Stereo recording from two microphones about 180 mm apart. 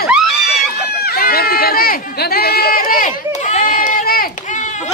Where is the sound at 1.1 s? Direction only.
60° left (ahead or behind).